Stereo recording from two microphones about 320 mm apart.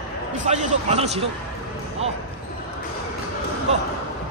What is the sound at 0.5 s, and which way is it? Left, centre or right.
Speech, right.